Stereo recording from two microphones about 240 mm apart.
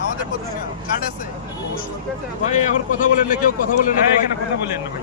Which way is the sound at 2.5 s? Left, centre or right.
Left.